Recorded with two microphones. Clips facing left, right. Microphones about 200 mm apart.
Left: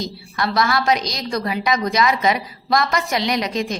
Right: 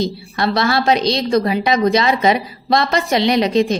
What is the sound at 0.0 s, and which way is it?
A woman's voice, 25° right (ahead or behind).